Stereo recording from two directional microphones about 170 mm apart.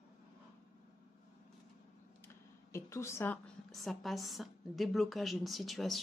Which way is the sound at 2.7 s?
15° left (ahead or behind).